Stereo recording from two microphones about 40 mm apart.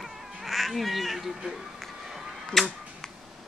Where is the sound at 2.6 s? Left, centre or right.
Centre.